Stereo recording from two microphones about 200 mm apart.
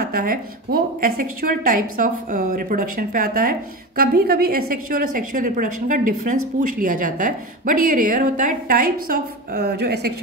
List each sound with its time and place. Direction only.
0.0 s a woman's voice: 45° right (ahead or behind)